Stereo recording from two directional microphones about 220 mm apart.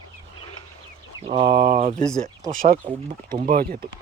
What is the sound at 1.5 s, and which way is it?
Speech, 45° right (ahead or behind).